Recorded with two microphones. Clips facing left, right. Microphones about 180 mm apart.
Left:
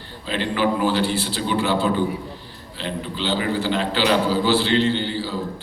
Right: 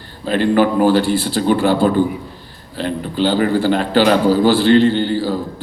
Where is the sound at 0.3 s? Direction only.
45° right (ahead or behind).